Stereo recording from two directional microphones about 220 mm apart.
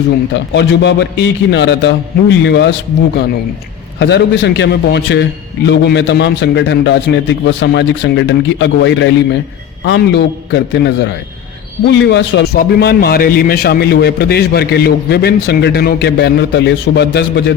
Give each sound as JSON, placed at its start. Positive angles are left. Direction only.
{"t": 0.3, "sound": "a man's voice", "side_deg": 50}
{"t": 4.0, "sound": "a man's voice", "side_deg": 50}